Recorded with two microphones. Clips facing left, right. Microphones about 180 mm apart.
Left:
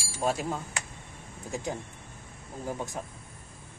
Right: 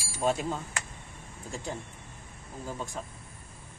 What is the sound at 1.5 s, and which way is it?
Speech, 15° left (ahead or behind).